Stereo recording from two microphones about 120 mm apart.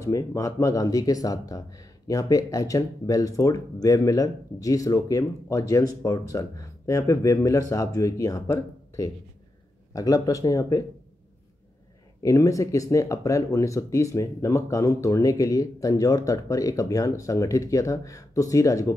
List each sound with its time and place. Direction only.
0.0 s speech: 25° left (ahead or behind)
12.2 s speech: 25° left (ahead or behind)